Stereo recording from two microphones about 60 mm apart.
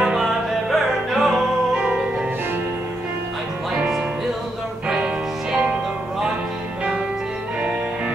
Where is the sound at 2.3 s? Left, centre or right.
Right.